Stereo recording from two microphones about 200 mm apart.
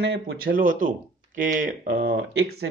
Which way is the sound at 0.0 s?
70° right (ahead or behind).